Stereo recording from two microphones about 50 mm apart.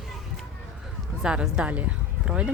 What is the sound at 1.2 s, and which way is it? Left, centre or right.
Speech, centre.